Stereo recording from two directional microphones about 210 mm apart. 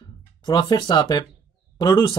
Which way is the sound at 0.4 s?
20° left (ahead or behind).